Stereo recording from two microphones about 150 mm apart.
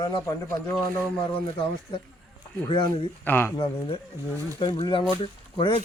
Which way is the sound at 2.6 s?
30° left (ahead or behind).